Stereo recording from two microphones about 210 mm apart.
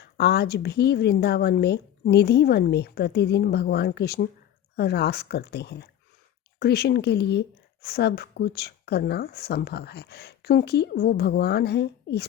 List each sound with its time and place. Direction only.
0.0 s speech: 50° left (ahead or behind)